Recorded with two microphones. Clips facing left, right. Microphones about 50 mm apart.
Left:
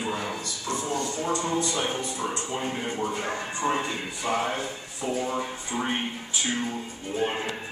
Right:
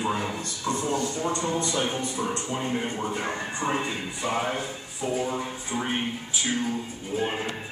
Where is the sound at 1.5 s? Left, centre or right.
Right.